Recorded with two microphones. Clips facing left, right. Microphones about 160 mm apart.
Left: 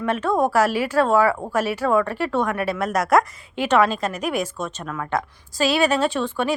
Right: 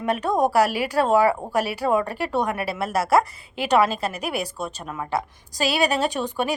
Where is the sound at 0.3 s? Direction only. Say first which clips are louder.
Even; 15° right (ahead or behind).